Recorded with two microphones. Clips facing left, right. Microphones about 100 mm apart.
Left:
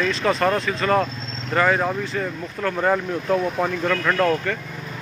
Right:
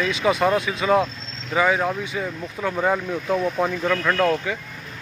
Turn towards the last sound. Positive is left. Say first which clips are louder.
# even
turn(degrees=0)  # may be behind; listen again after turning